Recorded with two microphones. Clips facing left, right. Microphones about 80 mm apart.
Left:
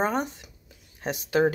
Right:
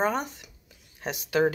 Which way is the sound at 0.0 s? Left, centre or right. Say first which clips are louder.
Left 1 dB; left.